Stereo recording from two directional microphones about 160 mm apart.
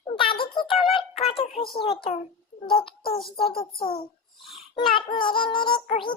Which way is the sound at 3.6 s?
35° left (ahead or behind).